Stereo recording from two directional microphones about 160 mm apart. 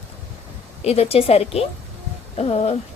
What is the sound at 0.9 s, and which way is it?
A woman's voice, 40° left (ahead or behind).